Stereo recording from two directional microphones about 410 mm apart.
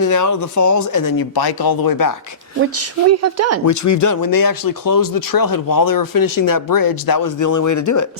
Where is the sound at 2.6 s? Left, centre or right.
Right.